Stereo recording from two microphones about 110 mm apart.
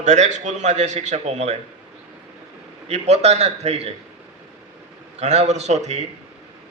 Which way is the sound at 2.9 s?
85° right.